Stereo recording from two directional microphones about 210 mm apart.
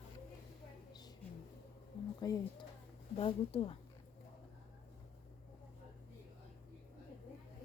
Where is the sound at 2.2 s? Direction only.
20° left (ahead or behind).